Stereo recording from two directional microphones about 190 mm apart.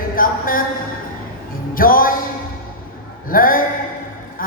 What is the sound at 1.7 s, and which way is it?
Music, 50° left (ahead or behind).